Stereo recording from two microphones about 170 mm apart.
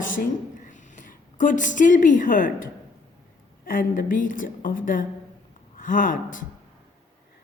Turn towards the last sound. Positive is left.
turn(degrees=55)  # may be behind; listen again after turning